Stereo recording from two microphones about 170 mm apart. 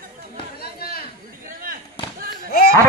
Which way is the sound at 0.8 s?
65° left (ahead or behind).